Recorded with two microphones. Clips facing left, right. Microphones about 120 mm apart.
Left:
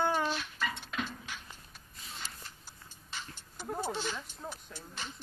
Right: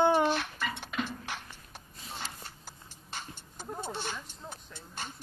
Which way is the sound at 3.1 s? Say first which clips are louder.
Right 2 dB; 50° right (ahead or behind).